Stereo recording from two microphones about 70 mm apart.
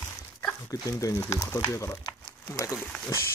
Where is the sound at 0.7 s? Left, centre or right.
Left.